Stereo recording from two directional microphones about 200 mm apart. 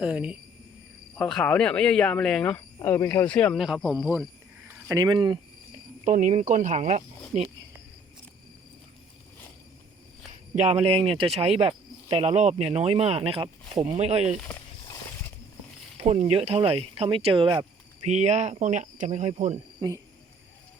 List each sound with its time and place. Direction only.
0.0 s speech: 5° right (ahead or behind)
4.9 s speech: 15° right (ahead or behind)
6.1 s cricket: 35° right (ahead or behind)
10.5 s cricket: 30° right (ahead or behind)
16.0 s speech: 35° right (ahead or behind)
18.0 s cricket: 35° right (ahead or behind)
19.8 s speech: 20° right (ahead or behind)